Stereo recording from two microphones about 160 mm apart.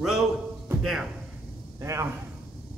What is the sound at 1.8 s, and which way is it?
Speech, 15° right (ahead or behind).